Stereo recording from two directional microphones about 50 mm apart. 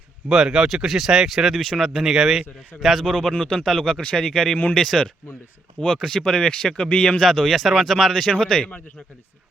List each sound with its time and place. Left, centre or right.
0.3 s speech: centre
1.5 s speech: centre
1.8 s a man's voice: centre
3.1 s speech: centre
7.2 s a man's voice: centre
8.1 s speech: centre